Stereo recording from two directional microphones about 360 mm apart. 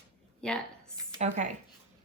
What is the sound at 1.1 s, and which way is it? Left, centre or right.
Speech, centre.